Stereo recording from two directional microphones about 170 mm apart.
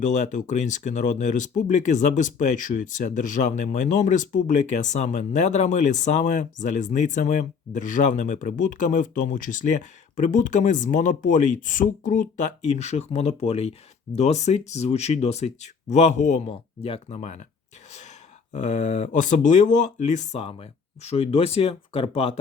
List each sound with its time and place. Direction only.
0.0 s speech: 45° left (ahead or behind)
18.5 s speech: 45° left (ahead or behind)